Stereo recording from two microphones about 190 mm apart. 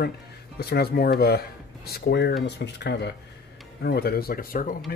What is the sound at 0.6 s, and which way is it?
Speech, 55° left (ahead or behind).